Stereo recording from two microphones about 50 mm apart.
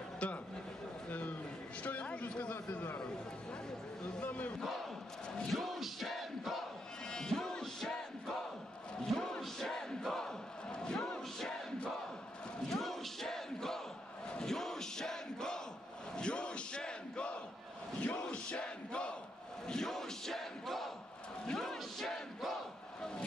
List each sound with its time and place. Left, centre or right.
0.2 s a sound: left
1.8 s a sound: left
4.2 s battle cry: left
4.6 s battle cry: centre
7.1 s music: centre
9.1 s battle cry: centre
12.6 s crowd: centre
14.4 s battle cry: centre
18.0 s a sound: left
19.7 s crowd: centre
21.5 s battle cry: centre